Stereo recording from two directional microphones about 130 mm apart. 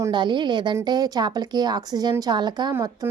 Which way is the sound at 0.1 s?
35° right (ahead or behind).